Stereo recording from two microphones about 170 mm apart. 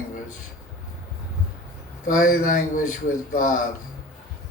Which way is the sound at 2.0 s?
50° left (ahead or behind).